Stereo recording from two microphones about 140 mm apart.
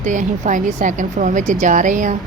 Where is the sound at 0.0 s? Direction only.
65° right (ahead or behind).